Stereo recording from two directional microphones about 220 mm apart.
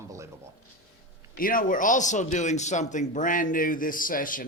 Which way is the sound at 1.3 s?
40° left (ahead or behind).